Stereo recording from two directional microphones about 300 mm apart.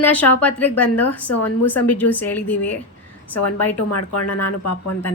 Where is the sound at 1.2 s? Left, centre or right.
Left.